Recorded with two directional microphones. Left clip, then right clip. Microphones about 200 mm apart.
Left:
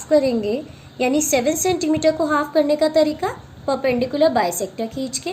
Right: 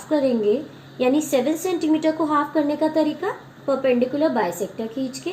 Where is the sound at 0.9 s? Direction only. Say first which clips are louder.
Left 1 dB; 35° left (ahead or behind).